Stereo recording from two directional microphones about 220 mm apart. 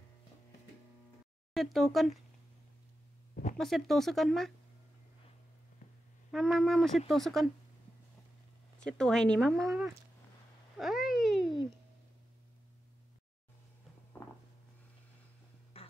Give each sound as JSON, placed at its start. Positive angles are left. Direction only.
{"t": 1.5, "sound": "speech", "side_deg": 0}
{"t": 3.5, "sound": "speech", "side_deg": 0}
{"t": 6.3, "sound": "speech", "side_deg": 0}
{"t": 8.7, "sound": "speech", "side_deg": 5}
{"t": 10.8, "sound": "a sound", "side_deg": 0}
{"t": 15.7, "sound": "music", "side_deg": 25}